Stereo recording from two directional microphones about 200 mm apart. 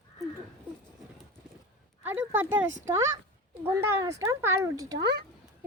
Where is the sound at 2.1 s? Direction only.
80° right.